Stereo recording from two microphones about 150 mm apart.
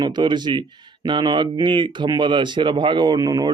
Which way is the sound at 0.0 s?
30° right (ahead or behind).